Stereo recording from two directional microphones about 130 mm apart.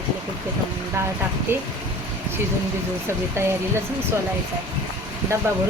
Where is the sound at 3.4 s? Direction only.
20° right (ahead or behind).